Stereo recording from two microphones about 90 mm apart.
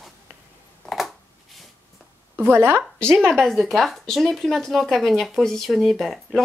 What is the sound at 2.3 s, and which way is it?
Speech, 25° right (ahead or behind).